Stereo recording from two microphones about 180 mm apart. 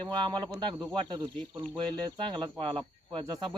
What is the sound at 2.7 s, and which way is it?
Speech, 25° right (ahead or behind).